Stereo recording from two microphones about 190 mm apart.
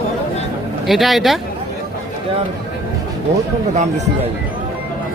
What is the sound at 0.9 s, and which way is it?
Speech, centre (ahead or behind).